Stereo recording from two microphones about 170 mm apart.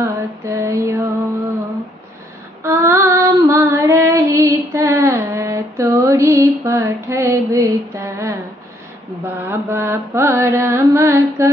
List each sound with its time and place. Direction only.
0.0 s female singing: 20° right (ahead or behind)
2.6 s female singing: 15° right (ahead or behind)
9.4 s mantra: 15° right (ahead or behind)